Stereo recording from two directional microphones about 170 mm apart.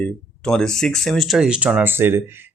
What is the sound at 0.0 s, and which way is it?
Speech, 5° left (ahead or behind).